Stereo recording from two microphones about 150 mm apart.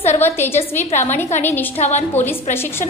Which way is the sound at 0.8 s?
50° left (ahead or behind).